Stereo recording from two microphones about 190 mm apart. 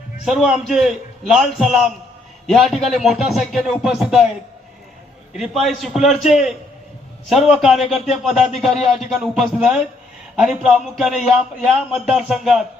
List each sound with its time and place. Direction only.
0.3 s a man's voice: centre (ahead or behind)
5.3 s a man's voice: centre (ahead or behind)
7.8 s speech: 35° left (ahead or behind)
8.1 s a man's voice: centre (ahead or behind)